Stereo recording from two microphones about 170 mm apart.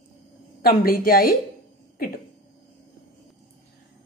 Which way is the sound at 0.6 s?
60° left (ahead or behind).